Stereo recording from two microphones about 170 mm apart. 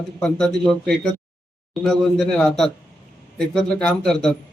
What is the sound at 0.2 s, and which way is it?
Speech, 5° left (ahead or behind).